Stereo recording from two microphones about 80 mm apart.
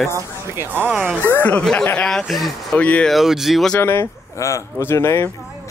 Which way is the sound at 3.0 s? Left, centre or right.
Centre.